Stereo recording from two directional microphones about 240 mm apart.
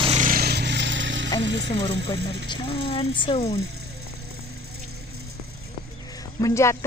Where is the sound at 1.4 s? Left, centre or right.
Right.